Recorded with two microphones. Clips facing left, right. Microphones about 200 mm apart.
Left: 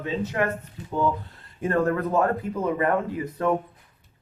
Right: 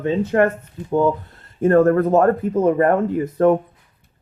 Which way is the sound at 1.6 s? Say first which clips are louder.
Right 9 dB; 45° right (ahead or behind).